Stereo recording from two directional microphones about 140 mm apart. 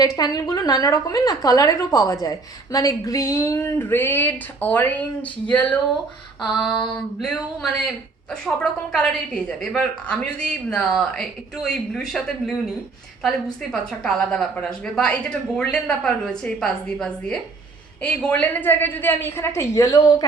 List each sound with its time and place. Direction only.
0.2 s a woman's voice: 25° left (ahead or behind); by 5.6 s 10° left (ahead or behind)
6.4 s a woman's voice: centre (ahead or behind)
8.3 s a woman's voice: 5° left (ahead or behind); by 20.2 s 25° left (ahead or behind)